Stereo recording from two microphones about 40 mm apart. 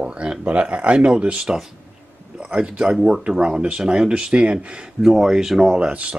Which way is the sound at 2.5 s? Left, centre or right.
Right.